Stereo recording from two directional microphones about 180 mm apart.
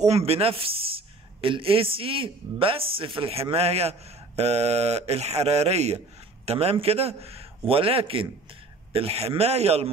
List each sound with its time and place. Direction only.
0.0 s speech: 35° right (ahead or behind)